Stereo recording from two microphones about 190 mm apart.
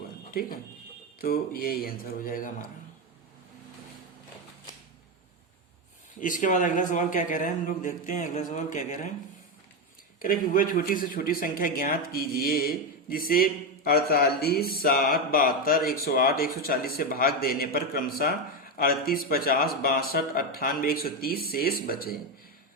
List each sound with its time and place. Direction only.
0.3 s speech: 50° left (ahead or behind)
6.1 s speech: 45° left (ahead or behind)
10.2 s speech: 50° left (ahead or behind)